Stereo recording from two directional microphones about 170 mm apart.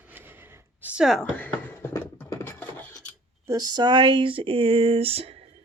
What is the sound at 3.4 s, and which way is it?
Speech, 20° right (ahead or behind).